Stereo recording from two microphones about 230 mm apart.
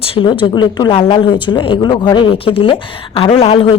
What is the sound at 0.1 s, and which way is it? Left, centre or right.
A woman's voice, left.